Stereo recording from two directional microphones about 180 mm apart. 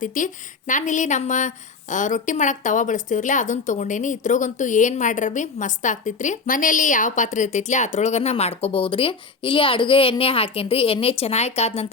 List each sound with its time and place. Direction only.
0.0 s a woman's voice: 45° left (ahead or behind)